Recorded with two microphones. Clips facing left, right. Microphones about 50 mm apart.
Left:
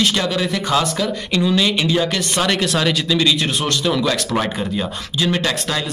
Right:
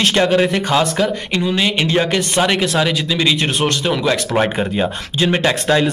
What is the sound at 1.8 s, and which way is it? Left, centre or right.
Speech, right.